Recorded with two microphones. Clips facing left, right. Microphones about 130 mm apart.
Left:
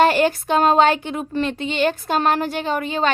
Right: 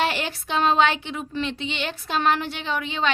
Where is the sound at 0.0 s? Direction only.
45° left (ahead or behind).